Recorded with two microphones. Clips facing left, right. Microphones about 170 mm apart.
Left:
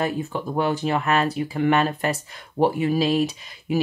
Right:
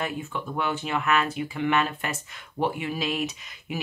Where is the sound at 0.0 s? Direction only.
35° left (ahead or behind).